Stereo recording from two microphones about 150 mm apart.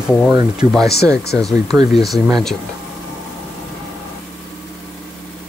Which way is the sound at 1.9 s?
Centre (ahead or behind).